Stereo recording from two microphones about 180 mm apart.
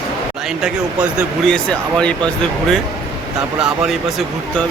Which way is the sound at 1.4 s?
5° left (ahead or behind).